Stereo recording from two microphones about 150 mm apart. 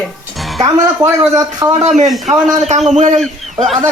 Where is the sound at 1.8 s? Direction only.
50° right (ahead or behind).